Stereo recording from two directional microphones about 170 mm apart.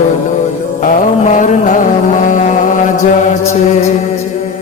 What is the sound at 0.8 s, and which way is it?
Mantra, 50° left (ahead or behind).